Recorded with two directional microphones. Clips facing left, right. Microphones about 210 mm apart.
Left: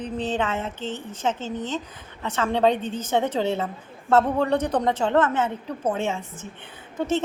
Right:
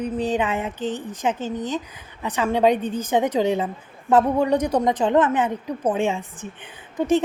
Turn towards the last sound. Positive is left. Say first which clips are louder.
# right 5 dB
turn(degrees=-15)  # may be behind; listen again after turning